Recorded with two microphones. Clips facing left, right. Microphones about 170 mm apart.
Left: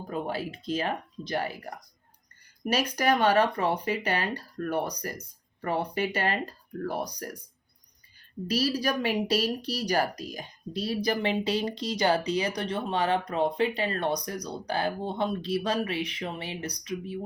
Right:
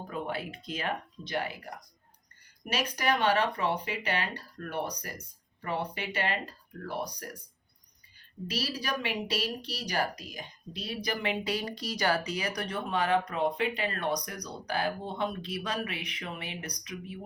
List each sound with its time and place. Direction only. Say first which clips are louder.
0.1 s a woman's voice: left 4 dB; 35° left (ahead or behind)
2.6 s a woman's voice: left 5 dB; 40° left (ahead or behind)
8.4 s a woman's voice: left 7 dB; 40° left (ahead or behind)